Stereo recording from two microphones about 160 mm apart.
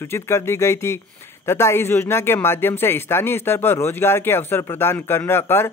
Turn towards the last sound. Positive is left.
turn(degrees=15)  # may be behind; listen again after turning